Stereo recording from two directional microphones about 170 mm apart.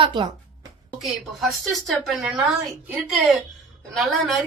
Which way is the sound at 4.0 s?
Centre (ahead or behind).